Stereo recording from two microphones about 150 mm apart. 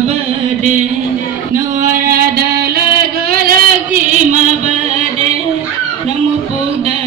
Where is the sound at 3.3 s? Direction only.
80° right.